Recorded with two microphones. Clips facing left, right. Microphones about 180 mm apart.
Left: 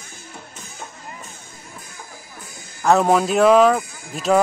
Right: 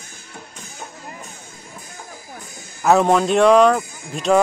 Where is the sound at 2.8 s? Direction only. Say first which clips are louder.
Right 1 dB; centre (ahead or behind).